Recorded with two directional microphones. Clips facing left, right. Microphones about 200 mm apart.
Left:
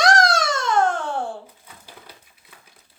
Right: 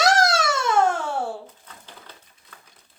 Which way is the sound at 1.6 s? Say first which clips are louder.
Left 1 dB; 10° left (ahead or behind).